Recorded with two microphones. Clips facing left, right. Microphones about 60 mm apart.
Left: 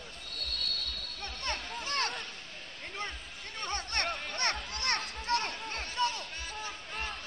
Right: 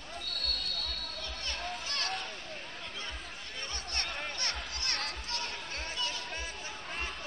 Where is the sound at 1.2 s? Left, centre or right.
Left.